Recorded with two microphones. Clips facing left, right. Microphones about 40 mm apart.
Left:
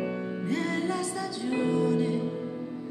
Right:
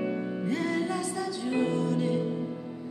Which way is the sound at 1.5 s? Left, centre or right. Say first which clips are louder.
Left 2 dB; centre.